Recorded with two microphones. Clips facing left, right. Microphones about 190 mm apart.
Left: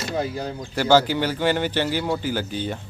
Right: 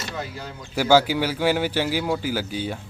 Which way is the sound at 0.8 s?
10° right (ahead or behind).